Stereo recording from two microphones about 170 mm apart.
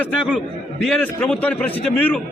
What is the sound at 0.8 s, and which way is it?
A man's voice, 5° left (ahead or behind).